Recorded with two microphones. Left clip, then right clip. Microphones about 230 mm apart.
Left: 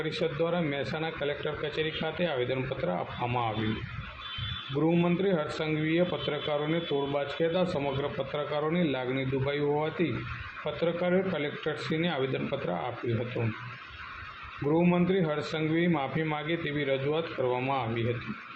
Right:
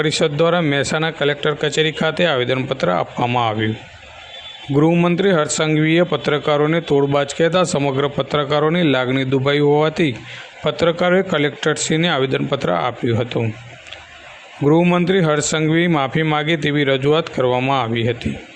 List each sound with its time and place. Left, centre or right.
0.0 s a man's voice: right
4.8 s a man's voice: right
14.7 s a man's voice: right